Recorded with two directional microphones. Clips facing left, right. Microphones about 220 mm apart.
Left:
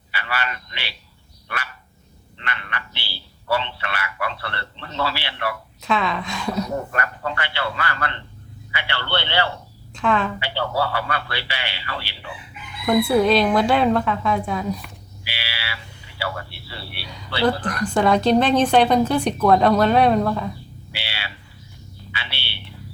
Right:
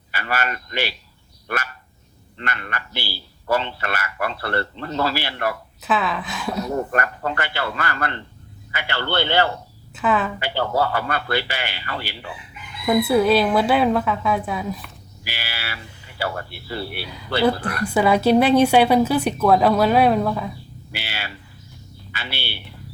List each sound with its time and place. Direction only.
0.1 s a man's voice: 45° right (ahead or behind)
2.4 s speech: 45° right (ahead or behind)
5.8 s speech: 5° right (ahead or behind)
6.9 s speech: 45° right (ahead or behind)
9.9 s speech: 5° right (ahead or behind)
10.4 s speech: 45° right (ahead or behind)
12.8 s speech: 5° right (ahead or behind)
15.2 s a sound: 45° right (ahead or behind)
17.4 s a woman's voice: 10° right (ahead or behind)
20.9 s a sound: 45° right (ahead or behind)